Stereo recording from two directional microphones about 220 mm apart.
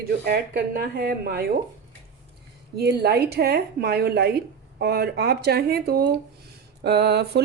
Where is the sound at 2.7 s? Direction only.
45° right (ahead or behind).